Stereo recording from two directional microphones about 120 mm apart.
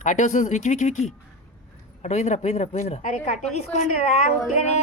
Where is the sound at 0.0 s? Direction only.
90° left.